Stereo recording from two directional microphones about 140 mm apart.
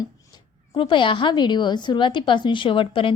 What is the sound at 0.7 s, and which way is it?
A woman's voice, 35° left (ahead or behind).